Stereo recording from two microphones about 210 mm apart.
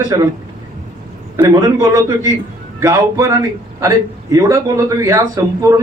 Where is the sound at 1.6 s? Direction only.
15° right (ahead or behind).